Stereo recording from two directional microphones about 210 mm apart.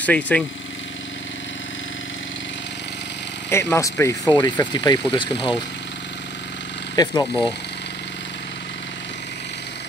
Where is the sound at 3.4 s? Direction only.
15° left (ahead or behind).